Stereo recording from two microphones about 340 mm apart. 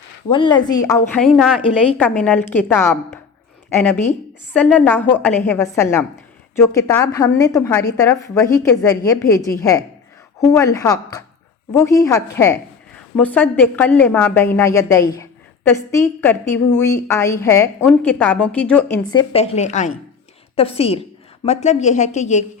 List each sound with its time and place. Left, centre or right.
0.3 s a woman's voice: centre